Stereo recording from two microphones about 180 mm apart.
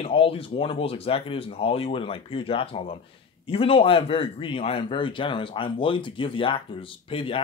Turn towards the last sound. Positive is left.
turn(degrees=30)  # may be behind; listen again after turning